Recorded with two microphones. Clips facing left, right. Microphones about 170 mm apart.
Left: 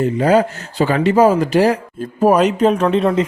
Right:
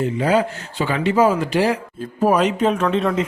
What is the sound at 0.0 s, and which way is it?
A man's voice, 45° left (ahead or behind).